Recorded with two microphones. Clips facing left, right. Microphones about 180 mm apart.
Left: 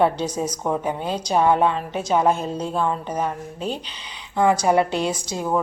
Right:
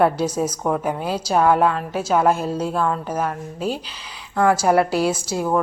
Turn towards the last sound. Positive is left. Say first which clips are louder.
# right 3 dB
turn(degrees=-5)  # may be behind; listen again after turning